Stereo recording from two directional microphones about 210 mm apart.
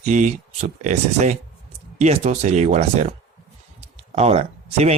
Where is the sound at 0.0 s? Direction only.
35° right (ahead or behind).